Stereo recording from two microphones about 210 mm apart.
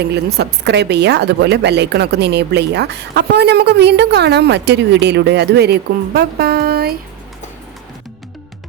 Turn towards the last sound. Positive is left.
turn(degrees=-50)  # may be behind; listen again after turning